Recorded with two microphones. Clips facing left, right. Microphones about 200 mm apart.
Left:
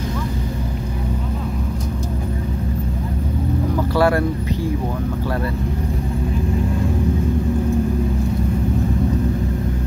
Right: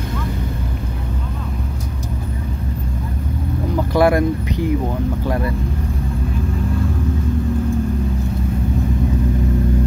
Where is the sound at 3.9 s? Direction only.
15° right (ahead or behind).